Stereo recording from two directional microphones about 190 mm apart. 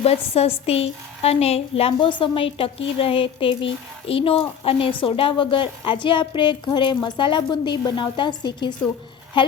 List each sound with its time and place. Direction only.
0.0 s a woman's voice: 30° left (ahead or behind)